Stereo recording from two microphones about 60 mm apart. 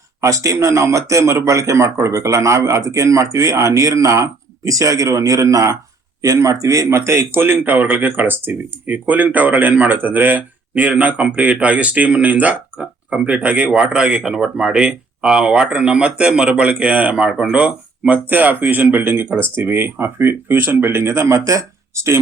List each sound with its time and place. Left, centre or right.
0.2 s a man's voice: right
12.8 s speech: centre
13.2 s speech: right
17.2 s speech: centre
17.5 s speech: right